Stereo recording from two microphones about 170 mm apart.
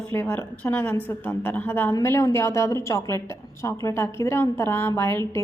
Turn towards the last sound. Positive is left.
turn(degrees=15)  # may be behind; listen again after turning